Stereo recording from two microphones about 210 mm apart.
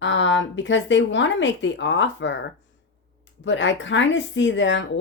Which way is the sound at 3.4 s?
60° left (ahead or behind).